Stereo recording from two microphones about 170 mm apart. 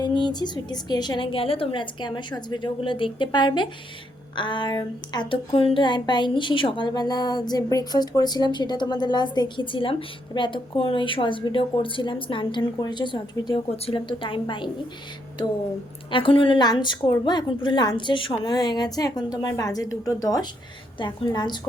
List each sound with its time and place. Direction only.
0.0 s speech: 25° left (ahead or behind)
16.1 s speech: 30° left (ahead or behind)